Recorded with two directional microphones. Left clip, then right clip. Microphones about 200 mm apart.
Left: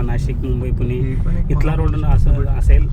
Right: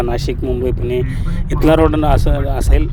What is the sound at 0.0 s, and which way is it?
Speech, 45° right (ahead or behind).